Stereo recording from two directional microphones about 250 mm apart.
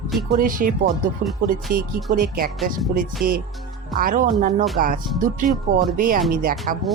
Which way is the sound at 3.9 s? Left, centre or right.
Right.